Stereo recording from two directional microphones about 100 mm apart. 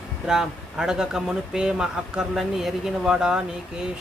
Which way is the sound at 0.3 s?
5° right (ahead or behind).